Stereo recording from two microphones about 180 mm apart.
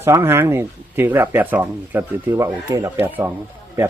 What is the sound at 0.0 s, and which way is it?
Speech, 15° right (ahead or behind).